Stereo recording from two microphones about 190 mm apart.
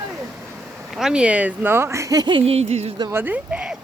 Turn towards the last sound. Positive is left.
turn(degrees=-5)  # may be behind; listen again after turning